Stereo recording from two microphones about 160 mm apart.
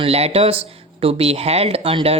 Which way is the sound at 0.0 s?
40° right (ahead or behind).